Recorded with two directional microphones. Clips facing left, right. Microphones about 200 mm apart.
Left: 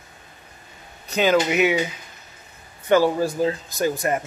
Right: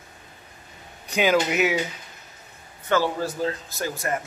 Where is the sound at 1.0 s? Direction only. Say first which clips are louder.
Left 2 dB; 10° right (ahead or behind).